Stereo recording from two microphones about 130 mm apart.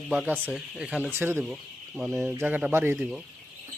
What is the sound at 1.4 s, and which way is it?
A man's voice, 5° right (ahead or behind).